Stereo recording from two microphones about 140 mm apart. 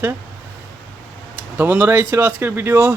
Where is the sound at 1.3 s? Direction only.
15° right (ahead or behind).